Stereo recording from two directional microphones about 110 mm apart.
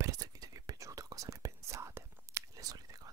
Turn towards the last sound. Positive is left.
turn(degrees=-35)  # may be behind; listen again after turning